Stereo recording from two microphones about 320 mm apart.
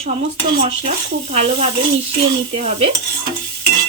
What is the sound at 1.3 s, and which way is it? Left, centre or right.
A woman's voice, centre.